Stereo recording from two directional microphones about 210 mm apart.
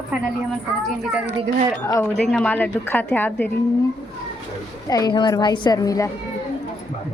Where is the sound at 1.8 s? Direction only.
15° left (ahead or behind).